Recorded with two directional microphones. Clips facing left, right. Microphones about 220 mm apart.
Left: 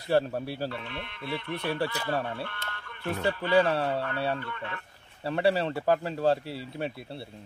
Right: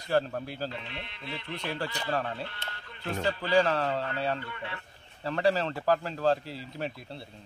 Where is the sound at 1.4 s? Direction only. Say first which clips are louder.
Left 4 dB; 20° right (ahead or behind).